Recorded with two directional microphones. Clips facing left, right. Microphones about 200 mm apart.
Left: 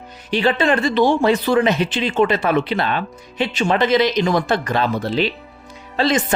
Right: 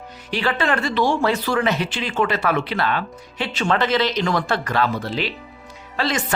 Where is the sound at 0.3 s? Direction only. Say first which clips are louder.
Left 5 dB; 20° left (ahead or behind).